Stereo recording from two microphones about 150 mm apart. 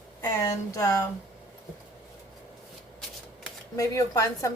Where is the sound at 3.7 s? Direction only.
20° left (ahead or behind).